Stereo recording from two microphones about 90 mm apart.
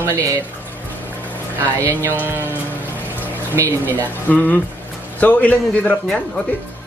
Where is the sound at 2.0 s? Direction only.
25° right (ahead or behind).